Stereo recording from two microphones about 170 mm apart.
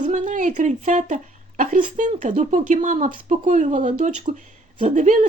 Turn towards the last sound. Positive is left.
turn(degrees=-45)  # may be behind; listen again after turning